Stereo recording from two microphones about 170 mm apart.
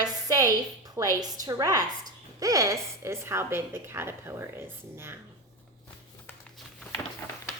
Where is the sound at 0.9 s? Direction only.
20° right (ahead or behind).